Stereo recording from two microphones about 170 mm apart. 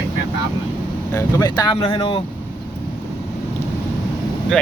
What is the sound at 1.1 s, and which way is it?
Speech, 20° left (ahead or behind).